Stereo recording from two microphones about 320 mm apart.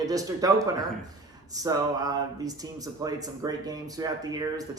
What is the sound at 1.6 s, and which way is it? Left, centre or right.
Speech, centre.